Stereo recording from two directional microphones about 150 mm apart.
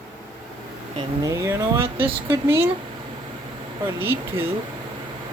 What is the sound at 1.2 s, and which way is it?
Speech, 20° right (ahead or behind).